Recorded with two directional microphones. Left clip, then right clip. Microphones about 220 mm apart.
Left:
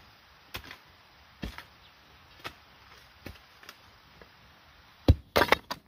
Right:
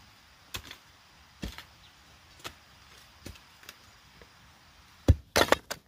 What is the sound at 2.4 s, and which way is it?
Vehicle, centre (ahead or behind).